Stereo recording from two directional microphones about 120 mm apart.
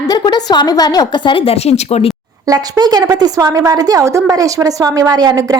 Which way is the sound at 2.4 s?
30° right (ahead or behind).